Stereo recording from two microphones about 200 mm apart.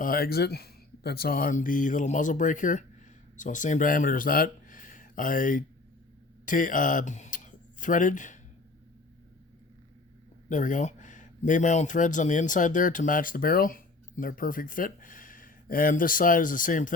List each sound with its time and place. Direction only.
0.0 s speech: 45° left (ahead or behind)
10.5 s speech: 40° left (ahead or behind)